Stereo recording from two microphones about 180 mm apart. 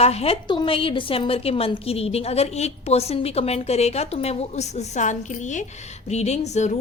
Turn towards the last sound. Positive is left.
turn(degrees=40)  # may be behind; listen again after turning